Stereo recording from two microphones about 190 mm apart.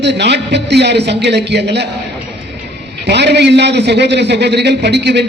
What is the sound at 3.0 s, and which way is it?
A man's voice, 65° right (ahead or behind).